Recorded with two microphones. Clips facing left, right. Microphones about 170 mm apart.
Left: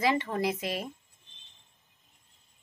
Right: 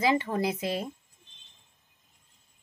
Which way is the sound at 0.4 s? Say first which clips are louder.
Right 1 dB; 25° right (ahead or behind).